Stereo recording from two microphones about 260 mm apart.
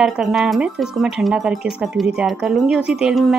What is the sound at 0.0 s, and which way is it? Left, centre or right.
Speech, centre.